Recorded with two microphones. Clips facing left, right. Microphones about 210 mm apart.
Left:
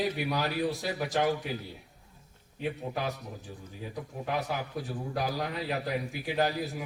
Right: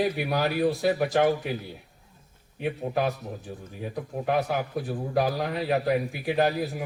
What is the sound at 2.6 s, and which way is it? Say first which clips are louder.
A man's voice: right 6 dB; 60° right (ahead or behind).